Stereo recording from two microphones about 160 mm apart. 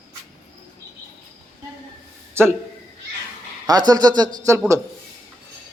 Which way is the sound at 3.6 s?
25° right (ahead or behind).